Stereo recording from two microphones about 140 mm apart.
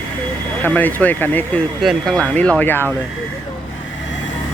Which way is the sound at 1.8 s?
Centre (ahead or behind).